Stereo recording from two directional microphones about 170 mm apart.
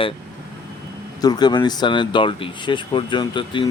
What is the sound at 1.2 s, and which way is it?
Speech, 25° left (ahead or behind).